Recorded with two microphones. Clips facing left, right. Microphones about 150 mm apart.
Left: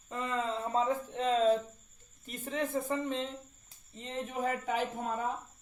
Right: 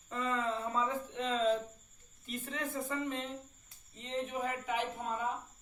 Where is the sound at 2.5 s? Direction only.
30° left (ahead or behind).